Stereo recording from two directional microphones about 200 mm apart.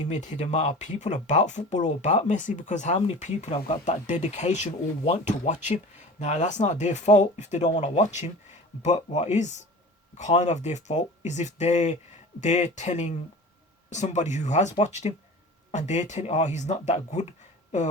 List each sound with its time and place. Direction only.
0.0 s speech: 40° left (ahead or behind)